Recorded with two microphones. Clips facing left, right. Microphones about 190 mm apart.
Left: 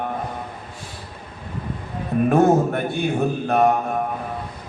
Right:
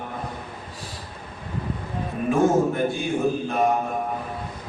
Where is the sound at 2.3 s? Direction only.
65° left (ahead or behind).